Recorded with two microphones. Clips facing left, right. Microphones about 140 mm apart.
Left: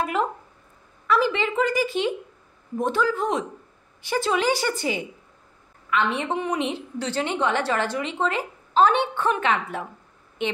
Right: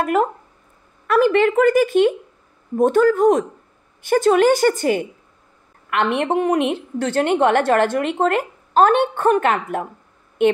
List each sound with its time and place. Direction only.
0.0 s a woman's voice: 50° right (ahead or behind)
5.9 s a woman's voice: 60° right (ahead or behind)